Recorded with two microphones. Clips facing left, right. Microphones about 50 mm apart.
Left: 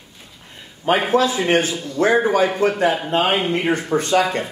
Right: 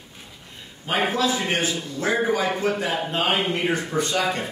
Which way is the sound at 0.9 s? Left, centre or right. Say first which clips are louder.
Left 6 dB; left.